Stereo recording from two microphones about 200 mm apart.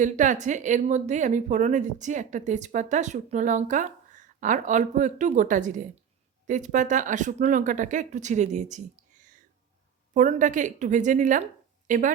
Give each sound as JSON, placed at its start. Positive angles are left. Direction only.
{"t": 0.0, "sound": "speech", "side_deg": -40}